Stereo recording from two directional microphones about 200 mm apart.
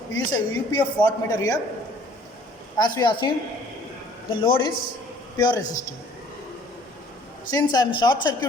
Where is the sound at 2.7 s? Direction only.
20° left (ahead or behind).